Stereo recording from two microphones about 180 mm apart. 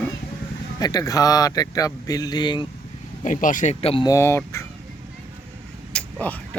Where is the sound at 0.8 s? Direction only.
20° left (ahead or behind).